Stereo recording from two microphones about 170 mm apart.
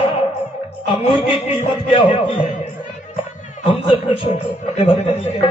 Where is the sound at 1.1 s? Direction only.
30° left (ahead or behind).